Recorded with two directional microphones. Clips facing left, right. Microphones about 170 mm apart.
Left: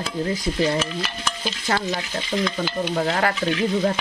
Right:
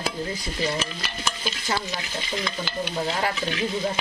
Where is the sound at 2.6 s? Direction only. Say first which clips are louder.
Left 5 dB; 55° left (ahead or behind).